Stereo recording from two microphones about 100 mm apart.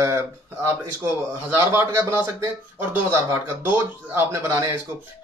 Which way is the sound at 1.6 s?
25° right (ahead or behind).